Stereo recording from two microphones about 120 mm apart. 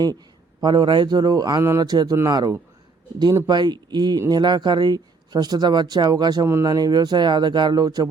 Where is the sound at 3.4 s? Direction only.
35° right (ahead or behind).